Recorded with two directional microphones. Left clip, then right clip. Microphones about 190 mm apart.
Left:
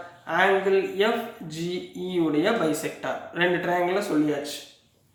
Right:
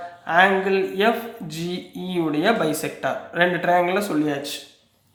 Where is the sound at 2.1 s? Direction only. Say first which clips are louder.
Right 3 dB; 45° right (ahead or behind).